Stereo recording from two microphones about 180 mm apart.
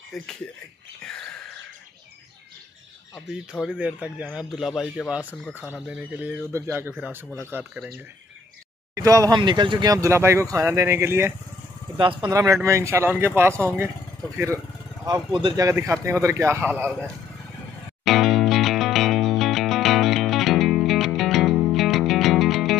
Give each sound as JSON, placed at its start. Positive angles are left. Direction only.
{"t": 0.1, "sound": "speech", "side_deg": 0}
{"t": 1.0, "sound": "a sound", "side_deg": 5}
{"t": 3.3, "sound": "speech", "side_deg": -5}
{"t": 8.9, "sound": "speech", "side_deg": -20}
{"t": 12.0, "sound": "speech", "side_deg": -25}
{"t": 15.0, "sound": "speech", "side_deg": -25}
{"t": 18.0, "sound": "music", "side_deg": 0}